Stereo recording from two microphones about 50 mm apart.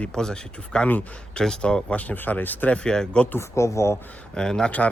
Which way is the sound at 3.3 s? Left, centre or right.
Left.